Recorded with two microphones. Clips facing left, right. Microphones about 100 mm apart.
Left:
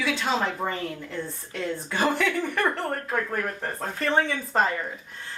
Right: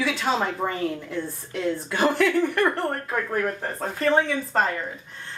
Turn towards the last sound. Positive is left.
turn(degrees=0)  # may be behind; listen again after turning